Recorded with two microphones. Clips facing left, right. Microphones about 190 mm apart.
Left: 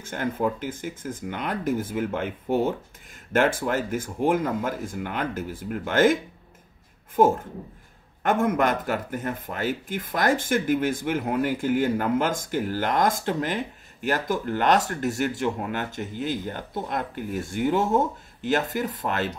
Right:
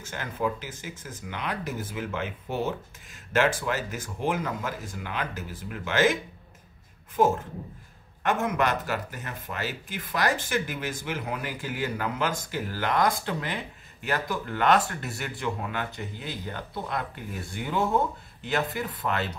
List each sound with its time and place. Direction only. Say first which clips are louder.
0.0 s speech: left 4 dB; 55° left (ahead or behind)
8.2 s speech: left 4 dB; 50° left (ahead or behind)